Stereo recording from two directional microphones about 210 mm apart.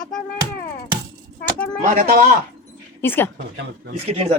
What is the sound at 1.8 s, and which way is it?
Speech, 35° right (ahead or behind).